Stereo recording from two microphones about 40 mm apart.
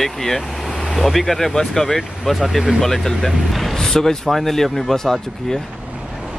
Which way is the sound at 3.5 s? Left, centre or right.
Centre.